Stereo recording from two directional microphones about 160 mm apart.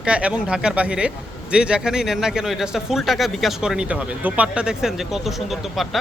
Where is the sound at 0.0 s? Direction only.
5° right (ahead or behind).